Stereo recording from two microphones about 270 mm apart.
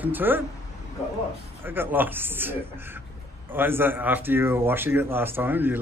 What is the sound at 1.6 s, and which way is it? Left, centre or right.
Speech, centre.